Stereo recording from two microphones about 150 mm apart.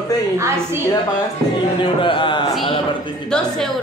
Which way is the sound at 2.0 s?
35° left (ahead or behind).